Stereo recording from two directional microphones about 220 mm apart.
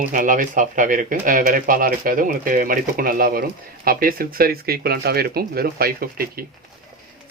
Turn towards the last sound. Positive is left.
turn(degrees=-45)  # may be behind; listen again after turning